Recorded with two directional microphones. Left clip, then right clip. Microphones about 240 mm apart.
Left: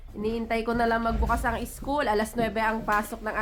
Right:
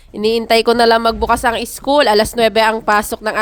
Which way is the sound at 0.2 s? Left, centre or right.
Right.